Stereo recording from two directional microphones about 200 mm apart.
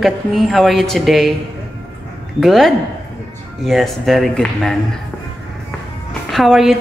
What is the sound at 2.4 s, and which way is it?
A woman's voice, centre (ahead or behind).